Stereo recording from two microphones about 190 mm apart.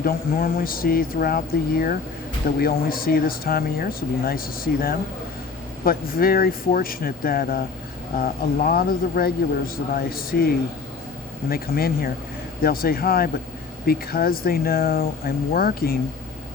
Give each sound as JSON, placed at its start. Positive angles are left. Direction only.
{"t": 0.0, "sound": "speech", "side_deg": 50}